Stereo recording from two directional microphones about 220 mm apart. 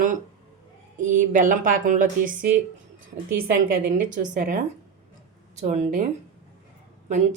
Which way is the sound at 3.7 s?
35° right (ahead or behind).